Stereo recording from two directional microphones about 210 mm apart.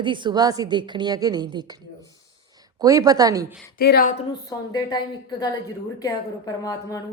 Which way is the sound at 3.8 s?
45° left (ahead or behind).